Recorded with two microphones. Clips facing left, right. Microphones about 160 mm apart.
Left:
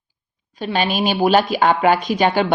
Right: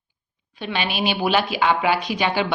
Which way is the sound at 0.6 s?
40° left (ahead or behind).